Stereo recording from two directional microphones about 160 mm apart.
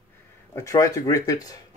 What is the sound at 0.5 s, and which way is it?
Speech, 20° left (ahead or behind).